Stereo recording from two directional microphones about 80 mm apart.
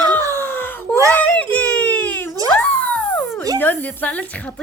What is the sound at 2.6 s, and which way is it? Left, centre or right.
Music, left.